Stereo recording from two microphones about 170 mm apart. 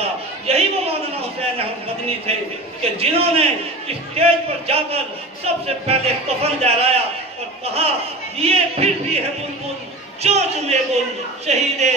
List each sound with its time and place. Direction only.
0.0 s a sound: 35° right (ahead or behind)
1.4 s a man's voice: 35° right (ahead or behind)
10.2 s a man's voice: 40° right (ahead or behind)